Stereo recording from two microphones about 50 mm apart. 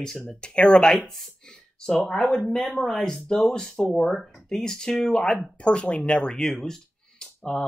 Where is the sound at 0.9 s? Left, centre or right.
Centre.